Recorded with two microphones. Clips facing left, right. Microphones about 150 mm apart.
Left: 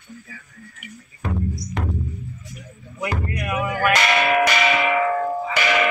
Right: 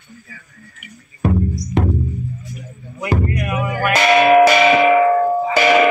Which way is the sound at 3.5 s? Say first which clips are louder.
Left 2 dB; 10° right (ahead or behind).